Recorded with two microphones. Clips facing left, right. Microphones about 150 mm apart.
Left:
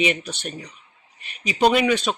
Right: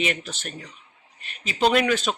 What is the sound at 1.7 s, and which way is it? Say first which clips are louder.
Speech: left 2 dB; centre (ahead or behind).